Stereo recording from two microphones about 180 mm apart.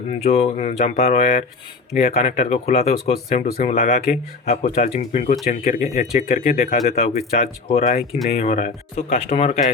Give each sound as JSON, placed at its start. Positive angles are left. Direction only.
{"t": 0.1, "sound": "speech", "side_deg": 40}
{"t": 3.4, "sound": "speech", "side_deg": 50}